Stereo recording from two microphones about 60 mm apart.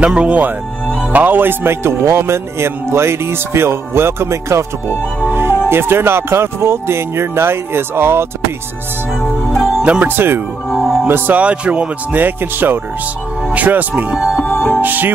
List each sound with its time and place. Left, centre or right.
0.0 s speech: centre
1.1 s speech: right
5.3 s music: right
5.7 s speech: right
10.0 s speech: right
10.7 s music: centre
11.1 s speech: right
11.3 s speech: right
14.4 s music: left
14.8 s speech: right